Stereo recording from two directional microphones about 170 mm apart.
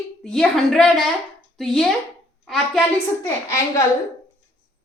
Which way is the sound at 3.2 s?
15° left (ahead or behind).